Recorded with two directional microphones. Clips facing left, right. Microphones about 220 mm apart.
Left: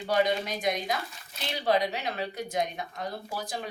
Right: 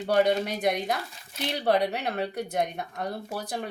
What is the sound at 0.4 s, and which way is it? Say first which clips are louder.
Speech: right 3 dB; 60° right (ahead or behind).